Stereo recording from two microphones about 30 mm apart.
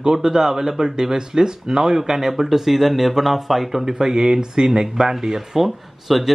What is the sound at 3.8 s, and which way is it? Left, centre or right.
Speech, centre.